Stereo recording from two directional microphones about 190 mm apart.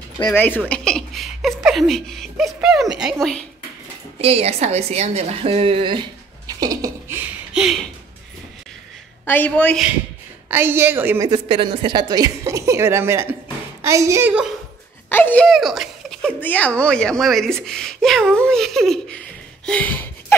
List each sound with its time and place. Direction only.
0.3 s a woman's voice: 10° left (ahead or behind)
4.2 s a woman's voice: 30° right (ahead or behind)
6.4 s a sound: 20° right (ahead or behind); by 7.8 s centre (ahead or behind)
9.2 s a woman's voice: 10° left (ahead or behind)
10.5 s a woman's voice: 10° right (ahead or behind)
11.2 s a woman's voice: 25° right (ahead or behind); by 14.5 s 10° right (ahead or behind)
15.0 s a woman's voice: 10° left (ahead or behind)